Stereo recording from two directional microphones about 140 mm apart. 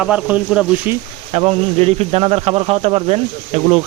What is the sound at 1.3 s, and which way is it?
Speech, 45° right (ahead or behind).